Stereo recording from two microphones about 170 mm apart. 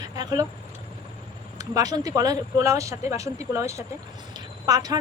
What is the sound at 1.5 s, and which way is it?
A woman's voice, 20° right (ahead or behind).